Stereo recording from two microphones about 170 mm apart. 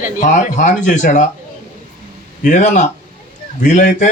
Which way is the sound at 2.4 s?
45° left (ahead or behind).